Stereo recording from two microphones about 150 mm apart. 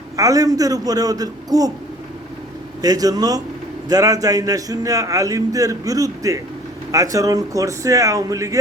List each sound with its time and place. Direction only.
0.2 s a man's voice: 25° right (ahead or behind)
2.8 s a man's voice: 25° right (ahead or behind)